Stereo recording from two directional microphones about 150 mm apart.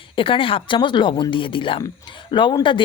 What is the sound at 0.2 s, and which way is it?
Speech, 35° left (ahead or behind).